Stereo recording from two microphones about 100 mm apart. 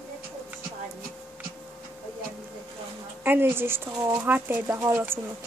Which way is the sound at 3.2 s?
20° right (ahead or behind).